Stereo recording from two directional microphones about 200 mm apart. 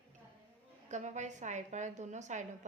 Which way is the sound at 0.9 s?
35° right (ahead or behind).